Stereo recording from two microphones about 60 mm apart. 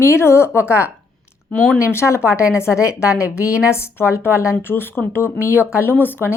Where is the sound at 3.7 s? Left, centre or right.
Left.